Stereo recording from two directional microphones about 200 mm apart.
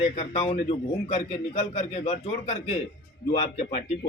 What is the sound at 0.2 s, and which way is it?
Speech, 30° left (ahead or behind).